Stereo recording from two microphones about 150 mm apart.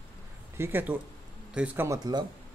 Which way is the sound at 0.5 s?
15° right (ahead or behind).